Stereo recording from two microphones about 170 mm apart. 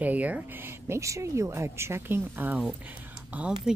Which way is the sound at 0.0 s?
10° right (ahead or behind).